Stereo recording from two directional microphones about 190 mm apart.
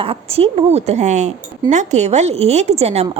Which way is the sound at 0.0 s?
30° right (ahead or behind).